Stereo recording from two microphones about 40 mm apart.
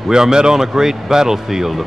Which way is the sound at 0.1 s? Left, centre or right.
Centre.